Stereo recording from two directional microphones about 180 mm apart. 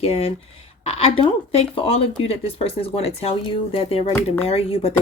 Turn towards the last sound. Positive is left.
turn(degrees=35)  # may be behind; listen again after turning